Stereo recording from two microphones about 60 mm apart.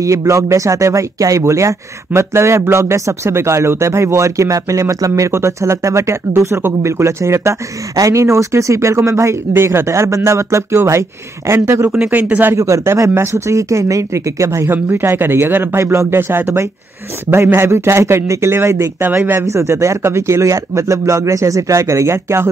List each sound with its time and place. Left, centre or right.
0.0 s speech: right
5.3 s speech: right
7.9 s speech: right
9.5 s speech: right
12.1 s speech: right
12.5 s speech: right
14.7 s speech: right
17.5 s speech: right
18.5 s speech: right
19.6 s speech: right